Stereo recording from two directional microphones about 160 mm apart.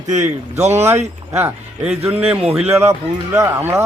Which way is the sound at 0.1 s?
45° right (ahead or behind).